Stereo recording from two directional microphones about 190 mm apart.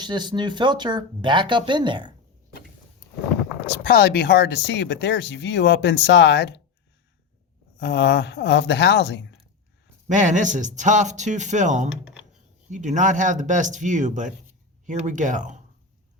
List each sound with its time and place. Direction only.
0.0 s speech: 25° right (ahead or behind)
3.7 s speech: 55° left (ahead or behind)
7.8 s speech: 65° left (ahead or behind)
10.1 s speech: 40° right (ahead or behind)